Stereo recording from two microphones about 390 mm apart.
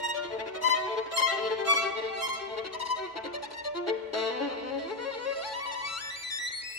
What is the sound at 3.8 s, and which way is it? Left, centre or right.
Violin, left.